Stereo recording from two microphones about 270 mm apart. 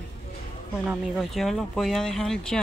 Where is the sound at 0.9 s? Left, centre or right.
Centre.